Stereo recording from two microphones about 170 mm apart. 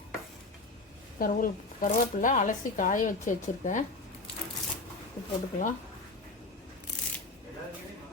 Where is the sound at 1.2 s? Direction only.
55° left (ahead or behind).